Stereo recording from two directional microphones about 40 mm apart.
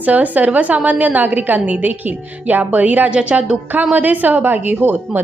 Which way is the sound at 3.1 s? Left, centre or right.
Right.